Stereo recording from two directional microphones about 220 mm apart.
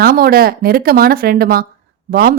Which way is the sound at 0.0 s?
40° right (ahead or behind).